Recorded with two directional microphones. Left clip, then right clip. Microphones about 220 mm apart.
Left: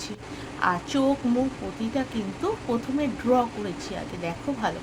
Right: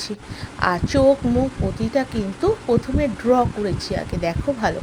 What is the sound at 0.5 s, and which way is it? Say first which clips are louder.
Speech: right 6 dB; 25° right (ahead or behind).